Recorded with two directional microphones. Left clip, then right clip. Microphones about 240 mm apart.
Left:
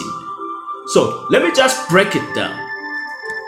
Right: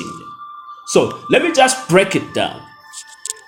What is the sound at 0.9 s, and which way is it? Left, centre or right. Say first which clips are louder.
Speech: even; right.